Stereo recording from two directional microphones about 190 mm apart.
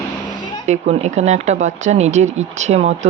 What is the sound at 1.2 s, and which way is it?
Speech, 40° right (ahead or behind).